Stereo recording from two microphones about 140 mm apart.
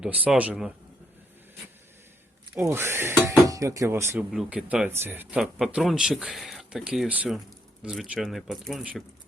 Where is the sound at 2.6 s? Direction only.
15° right (ahead or behind).